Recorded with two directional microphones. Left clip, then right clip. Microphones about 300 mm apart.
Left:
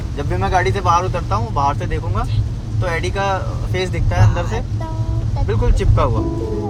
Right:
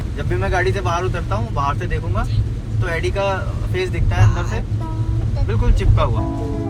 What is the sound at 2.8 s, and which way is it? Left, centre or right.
Speech, left.